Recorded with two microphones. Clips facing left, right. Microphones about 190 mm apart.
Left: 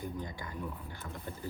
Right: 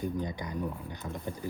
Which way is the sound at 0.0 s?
20° right (ahead or behind).